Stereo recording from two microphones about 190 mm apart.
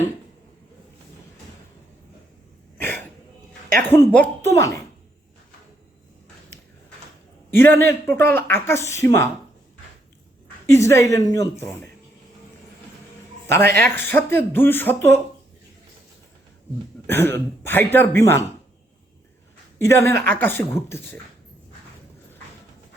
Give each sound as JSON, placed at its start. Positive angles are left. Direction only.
{"t": 2.8, "sound": "throat clearing", "side_deg": 10}
{"t": 3.8, "sound": "speech", "side_deg": 10}
{"t": 7.5, "sound": "speech", "side_deg": 10}
{"t": 10.7, "sound": "speech", "side_deg": 15}
{"t": 13.5, "sound": "speech", "side_deg": 10}
{"t": 17.1, "sound": "speech", "side_deg": 10}
{"t": 19.9, "sound": "speech", "side_deg": 15}